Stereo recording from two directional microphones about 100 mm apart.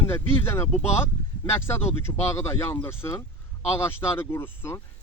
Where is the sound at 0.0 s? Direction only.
25° left (ahead or behind).